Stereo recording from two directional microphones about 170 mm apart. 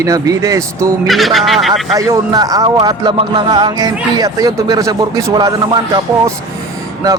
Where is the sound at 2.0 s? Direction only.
20° right (ahead or behind).